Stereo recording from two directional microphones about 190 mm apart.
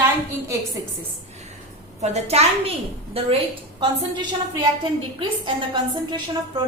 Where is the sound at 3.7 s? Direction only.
25° right (ahead or behind).